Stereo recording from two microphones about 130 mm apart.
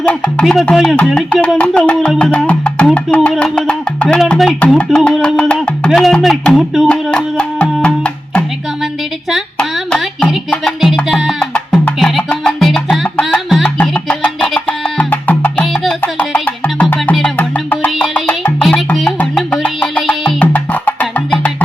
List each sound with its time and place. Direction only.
0.0 s music: 10° left (ahead or behind)
4.3 s speech: 5° left (ahead or behind)
4.8 s music: 5° left (ahead or behind)
6.8 s speech: 5° left (ahead or behind)
9.3 s a sound: centre (ahead or behind)
10.5 s music: 5° left (ahead or behind)
18.6 s music: centre (ahead or behind)